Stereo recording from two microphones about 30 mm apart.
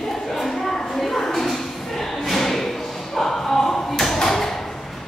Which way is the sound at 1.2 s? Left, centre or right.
Centre.